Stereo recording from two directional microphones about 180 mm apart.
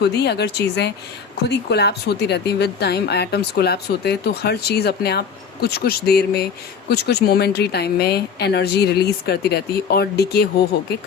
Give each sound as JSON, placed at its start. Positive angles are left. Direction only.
{"t": 0.0, "sound": "speech", "side_deg": 65}